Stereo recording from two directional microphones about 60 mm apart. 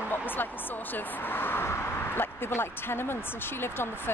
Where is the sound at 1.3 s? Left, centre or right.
Left.